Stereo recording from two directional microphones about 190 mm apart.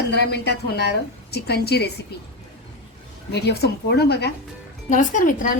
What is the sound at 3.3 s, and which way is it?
A woman's voice, 60° left (ahead or behind).